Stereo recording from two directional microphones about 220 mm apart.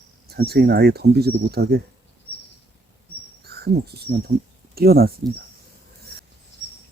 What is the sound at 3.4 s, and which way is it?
Speech, 45° right (ahead or behind).